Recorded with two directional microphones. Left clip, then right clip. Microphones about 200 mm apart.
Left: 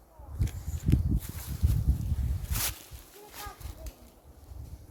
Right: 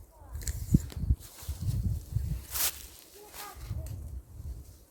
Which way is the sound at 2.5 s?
10° right (ahead or behind).